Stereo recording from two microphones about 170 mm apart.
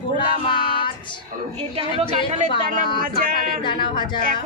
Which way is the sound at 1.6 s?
35° right (ahead or behind).